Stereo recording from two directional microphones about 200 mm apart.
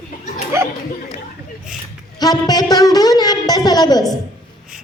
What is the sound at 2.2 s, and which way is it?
A woman's voice, 20° left (ahead or behind).